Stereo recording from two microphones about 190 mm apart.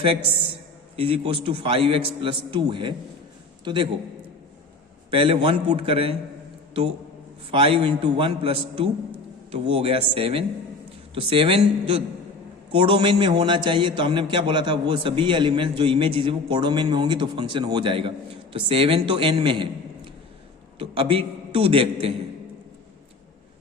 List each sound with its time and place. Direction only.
1.0 s a man's voice: 30° right (ahead or behind)
5.1 s a man's voice: 30° right (ahead or behind)
7.5 s a man's voice: 25° right (ahead or behind)
20.7 s a man's voice: 30° right (ahead or behind)